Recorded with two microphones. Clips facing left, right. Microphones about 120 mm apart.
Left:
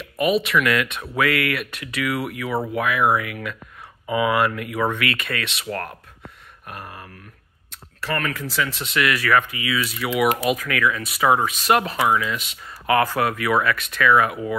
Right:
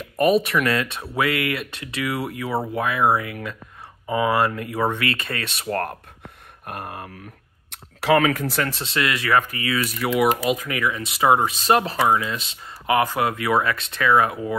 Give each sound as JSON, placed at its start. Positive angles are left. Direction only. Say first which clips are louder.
{"t": 0.0, "sound": "speech", "louder": "right 2 dB", "side_deg": -40}
{"t": 6.6, "sound": "mantra", "louder": "right 4 dB", "side_deg": -50}
{"t": 7.7, "sound": "speech", "louder": "right 9 dB", "side_deg": -85}
{"t": 8.6, "sound": "speech", "louder": "left 1 dB", "side_deg": -35}
{"t": 9.4, "sound": "speech", "louder": "right 1 dB", "side_deg": -40}
{"t": 10.5, "sound": "speech", "louder": "left 1 dB", "side_deg": -25}
{"t": 12.9, "sound": "speech", "louder": "left 1 dB", "side_deg": -20}